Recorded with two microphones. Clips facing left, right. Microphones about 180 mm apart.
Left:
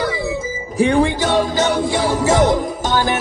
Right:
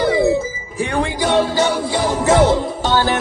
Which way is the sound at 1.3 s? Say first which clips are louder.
Right 1 dB; 15° left (ahead or behind).